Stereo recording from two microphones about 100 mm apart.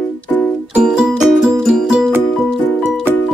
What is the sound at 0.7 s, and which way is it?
Music, 5° right (ahead or behind).